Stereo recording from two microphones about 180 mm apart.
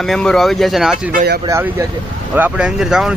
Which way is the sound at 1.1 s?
60° right (ahead or behind).